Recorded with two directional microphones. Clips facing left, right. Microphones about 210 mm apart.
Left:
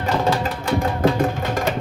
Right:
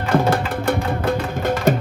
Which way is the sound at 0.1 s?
50° right (ahead or behind).